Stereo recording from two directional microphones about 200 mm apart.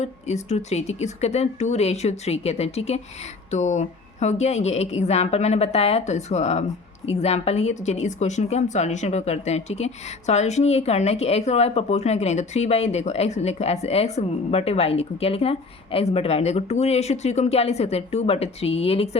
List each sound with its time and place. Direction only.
0.0 s a woman's voice: 35° left (ahead or behind)